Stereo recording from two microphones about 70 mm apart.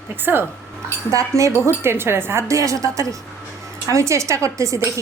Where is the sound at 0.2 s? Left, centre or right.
Right.